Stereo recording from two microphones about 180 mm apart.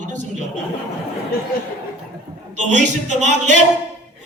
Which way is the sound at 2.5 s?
45° right (ahead or behind).